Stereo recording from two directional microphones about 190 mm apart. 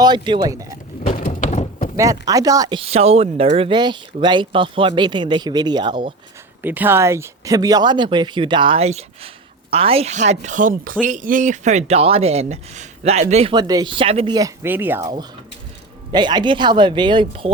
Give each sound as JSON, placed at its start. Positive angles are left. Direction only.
{"t": 0.0, "sound": "speech", "side_deg": -20}
{"t": 1.0, "sound": "a sound", "side_deg": 35}
{"t": 2.0, "sound": "speech", "side_deg": -20}
{"t": 6.6, "sound": "speech", "side_deg": -10}
{"t": 14.3, "sound": "speech", "side_deg": -15}